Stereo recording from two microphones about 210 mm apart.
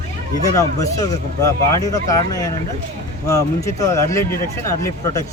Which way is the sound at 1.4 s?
15° left (ahead or behind).